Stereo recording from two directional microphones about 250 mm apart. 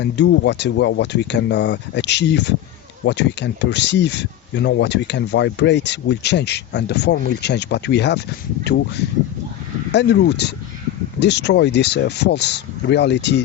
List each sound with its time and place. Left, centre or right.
0.0 s speech: left